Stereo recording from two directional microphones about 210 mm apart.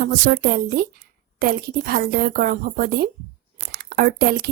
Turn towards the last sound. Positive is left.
turn(degrees=-45)  # may be behind; listen again after turning